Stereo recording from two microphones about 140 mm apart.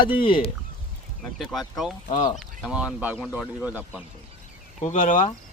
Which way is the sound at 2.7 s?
10° right (ahead or behind).